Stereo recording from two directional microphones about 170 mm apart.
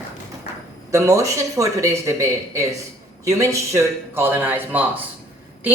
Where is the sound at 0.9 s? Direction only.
20° right (ahead or behind).